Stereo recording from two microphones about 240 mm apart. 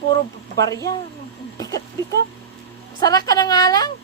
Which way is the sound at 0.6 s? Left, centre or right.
Centre.